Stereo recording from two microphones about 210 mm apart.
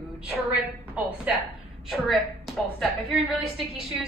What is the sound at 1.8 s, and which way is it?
A woman's voice, centre (ahead or behind).